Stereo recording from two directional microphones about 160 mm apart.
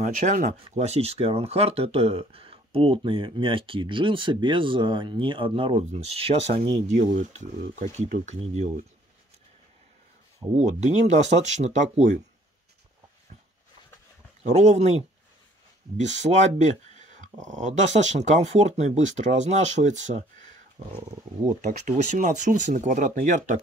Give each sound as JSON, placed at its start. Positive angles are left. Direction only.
{"t": 0.0, "sound": "speech", "side_deg": -50}
{"t": 10.5, "sound": "speech", "side_deg": -45}
{"t": 14.4, "sound": "speech", "side_deg": -45}